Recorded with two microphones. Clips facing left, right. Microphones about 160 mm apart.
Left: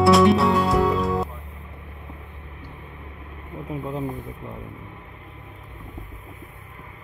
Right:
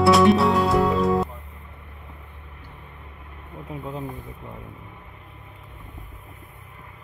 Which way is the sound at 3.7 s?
5° left (ahead or behind).